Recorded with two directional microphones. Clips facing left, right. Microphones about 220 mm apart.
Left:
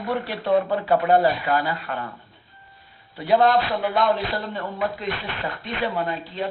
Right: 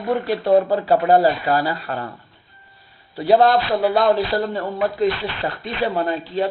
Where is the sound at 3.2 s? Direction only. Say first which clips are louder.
Right 3 dB; 35° right (ahead or behind).